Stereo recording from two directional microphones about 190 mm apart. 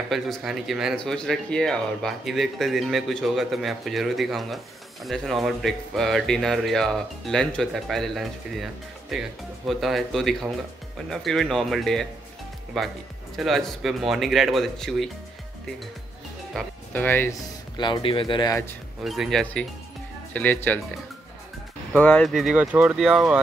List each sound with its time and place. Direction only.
0.1 s speech: centre (ahead or behind)
16.5 s speech: 10° left (ahead or behind)
17.7 s speech: 25° left (ahead or behind)
19.0 s speech: centre (ahead or behind)
21.9 s speech: 5° left (ahead or behind)